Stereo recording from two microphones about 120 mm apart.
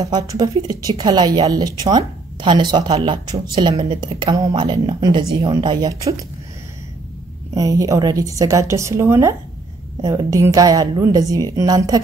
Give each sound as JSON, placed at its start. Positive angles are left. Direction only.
{"t": 0.0, "sound": "a woman's voice", "side_deg": -30}
{"t": 7.5, "sound": "a woman's voice", "side_deg": -30}